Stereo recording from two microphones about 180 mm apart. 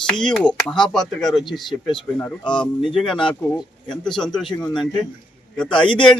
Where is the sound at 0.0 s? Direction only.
5° left (ahead or behind).